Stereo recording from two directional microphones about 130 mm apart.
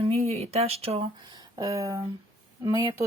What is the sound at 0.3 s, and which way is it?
Speech, 55° right (ahead or behind).